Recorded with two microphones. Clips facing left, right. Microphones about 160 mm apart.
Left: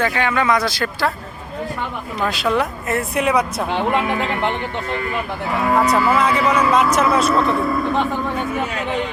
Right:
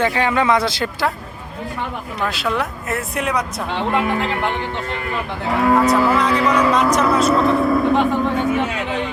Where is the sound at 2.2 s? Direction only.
Centre (ahead or behind).